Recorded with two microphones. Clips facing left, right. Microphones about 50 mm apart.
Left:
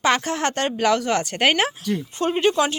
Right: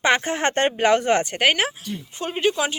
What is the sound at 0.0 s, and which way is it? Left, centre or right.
A woman's voice, right.